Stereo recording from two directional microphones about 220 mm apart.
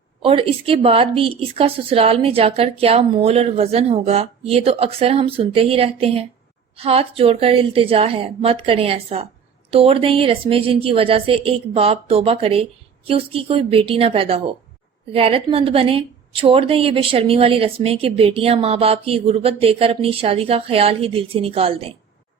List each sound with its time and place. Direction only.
0.2 s a woman's voice: 25° right (ahead or behind)